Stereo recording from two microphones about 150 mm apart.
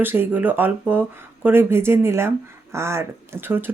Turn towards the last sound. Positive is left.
turn(degrees=-15)  # may be behind; listen again after turning